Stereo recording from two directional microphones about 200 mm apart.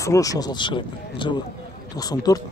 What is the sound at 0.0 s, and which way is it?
Speech, 15° left (ahead or behind).